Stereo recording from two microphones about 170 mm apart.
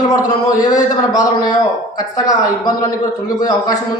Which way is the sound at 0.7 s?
20° left (ahead or behind).